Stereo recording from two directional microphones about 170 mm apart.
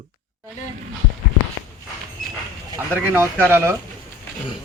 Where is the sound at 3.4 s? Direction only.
15° right (ahead or behind).